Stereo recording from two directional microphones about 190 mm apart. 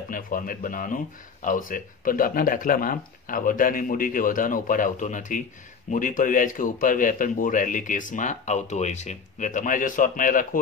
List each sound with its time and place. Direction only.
0.1 s speech: 45° left (ahead or behind)